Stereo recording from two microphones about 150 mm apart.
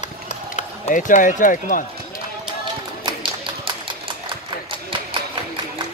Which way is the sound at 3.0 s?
35° right (ahead or behind).